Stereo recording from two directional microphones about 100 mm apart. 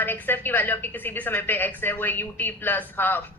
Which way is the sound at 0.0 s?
20° left (ahead or behind).